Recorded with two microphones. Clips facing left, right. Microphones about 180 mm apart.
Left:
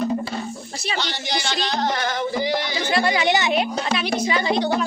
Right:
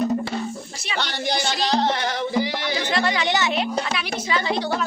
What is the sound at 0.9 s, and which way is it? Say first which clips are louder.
Speech: right 3 dB; 55° right (ahead or behind).